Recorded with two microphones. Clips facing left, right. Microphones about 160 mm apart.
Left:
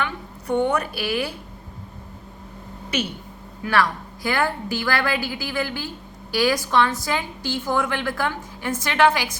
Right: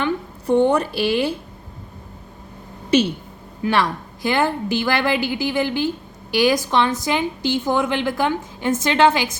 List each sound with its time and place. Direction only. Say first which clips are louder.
0.0 s a woman's voice: right 6 dB; 30° right (ahead or behind)
3.6 s a woman's voice: right 2 dB; 20° right (ahead or behind)